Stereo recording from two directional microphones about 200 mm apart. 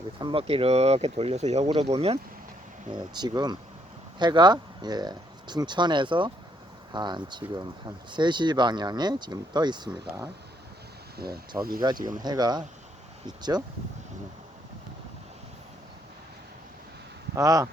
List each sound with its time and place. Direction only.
0.2 s speech: 25° right (ahead or behind)
2.9 s speech: 20° right (ahead or behind)
11.8 s speech: 20° right (ahead or behind)
17.3 s speech: 15° right (ahead or behind)